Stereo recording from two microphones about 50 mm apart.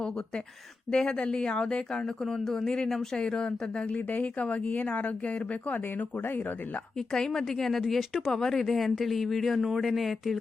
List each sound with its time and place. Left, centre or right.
0.9 s speech: centre
7.1 s speech: centre